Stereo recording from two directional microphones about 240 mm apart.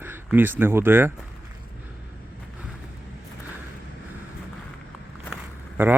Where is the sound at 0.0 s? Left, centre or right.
Centre.